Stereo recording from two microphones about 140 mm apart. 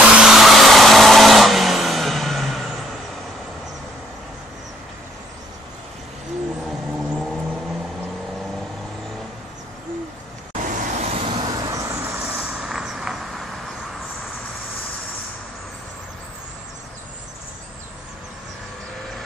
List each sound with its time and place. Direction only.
0.0 s vehicle: 5° right (ahead or behind)
7.0 s vehicle: centre (ahead or behind)
10.7 s vehicle: 50° right (ahead or behind); by 12.2 s 25° right (ahead or behind)
12.2 s vehicle: 5° right (ahead or behind)